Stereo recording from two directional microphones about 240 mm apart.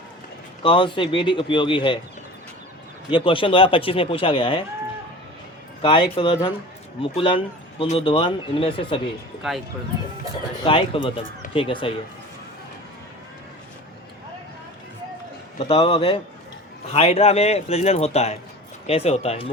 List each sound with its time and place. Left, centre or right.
0.6 s speech: left
3.1 s speech: left
5.8 s speech: left
9.4 s speech: centre
10.6 s speech: left
15.5 s speech: left